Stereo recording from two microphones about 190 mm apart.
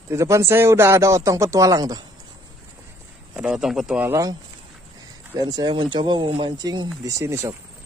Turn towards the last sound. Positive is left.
turn(degrees=-15)  # may be behind; listen again after turning